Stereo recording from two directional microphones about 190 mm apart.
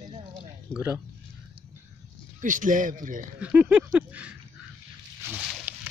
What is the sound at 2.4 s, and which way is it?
Speech, 45° right (ahead or behind).